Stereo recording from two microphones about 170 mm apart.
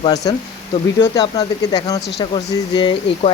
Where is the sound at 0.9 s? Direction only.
25° left (ahead or behind).